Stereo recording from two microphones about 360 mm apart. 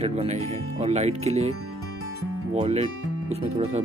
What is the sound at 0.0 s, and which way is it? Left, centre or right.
Speech, centre.